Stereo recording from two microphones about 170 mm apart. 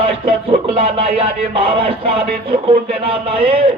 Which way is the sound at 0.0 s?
30° right (ahead or behind).